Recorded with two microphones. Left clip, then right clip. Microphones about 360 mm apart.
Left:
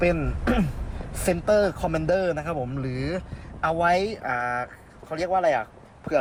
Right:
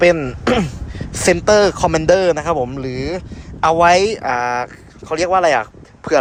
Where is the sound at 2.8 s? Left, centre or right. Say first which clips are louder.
Right 7 dB; centre.